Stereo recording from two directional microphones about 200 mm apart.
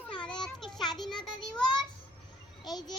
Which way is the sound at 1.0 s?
Centre (ahead or behind).